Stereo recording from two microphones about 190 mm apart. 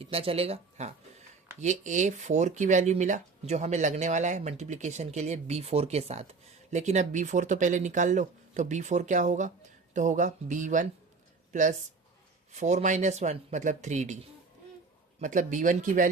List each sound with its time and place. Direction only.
0.0 s speech: 30° right (ahead or behind)
15.2 s speech: 40° right (ahead or behind)